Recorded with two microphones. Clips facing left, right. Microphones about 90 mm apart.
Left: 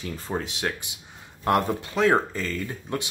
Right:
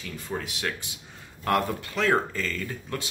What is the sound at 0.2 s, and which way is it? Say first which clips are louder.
Speech: left 2 dB; 30° left (ahead or behind).